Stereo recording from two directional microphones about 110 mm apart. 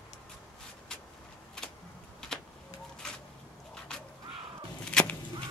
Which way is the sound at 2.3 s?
5° left (ahead or behind).